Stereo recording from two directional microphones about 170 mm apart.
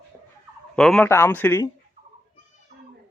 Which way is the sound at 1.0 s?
15° left (ahead or behind).